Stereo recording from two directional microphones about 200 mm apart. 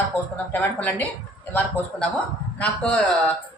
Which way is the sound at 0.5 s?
10° left (ahead or behind).